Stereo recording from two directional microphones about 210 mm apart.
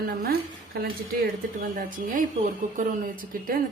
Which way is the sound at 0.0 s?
45° right (ahead or behind).